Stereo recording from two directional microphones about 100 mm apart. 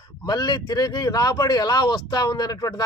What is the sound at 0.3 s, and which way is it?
Speech, 40° left (ahead or behind).